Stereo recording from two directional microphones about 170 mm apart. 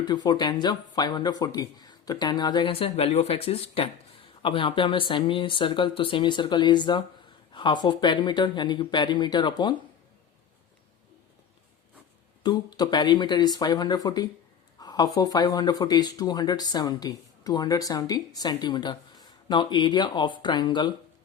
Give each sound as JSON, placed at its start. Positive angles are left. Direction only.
{"t": 0.0, "sound": "speech", "side_deg": 25}
{"t": 12.4, "sound": "speech", "side_deg": 25}